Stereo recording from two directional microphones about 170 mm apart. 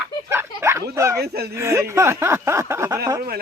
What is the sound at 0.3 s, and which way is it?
Speech, 15° right (ahead or behind).